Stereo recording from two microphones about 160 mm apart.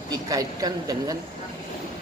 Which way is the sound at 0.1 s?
25° right (ahead or behind).